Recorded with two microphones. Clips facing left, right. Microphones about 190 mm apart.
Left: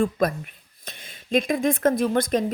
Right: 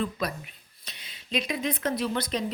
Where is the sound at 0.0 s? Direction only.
50° left (ahead or behind).